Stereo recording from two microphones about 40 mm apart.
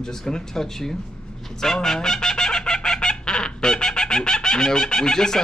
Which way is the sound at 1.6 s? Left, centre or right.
Centre.